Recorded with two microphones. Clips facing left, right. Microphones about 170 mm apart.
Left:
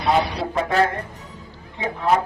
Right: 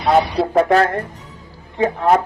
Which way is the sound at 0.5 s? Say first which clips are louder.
Right 6 dB; 55° right (ahead or behind).